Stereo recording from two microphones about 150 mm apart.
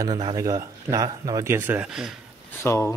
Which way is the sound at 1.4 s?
15° right (ahead or behind).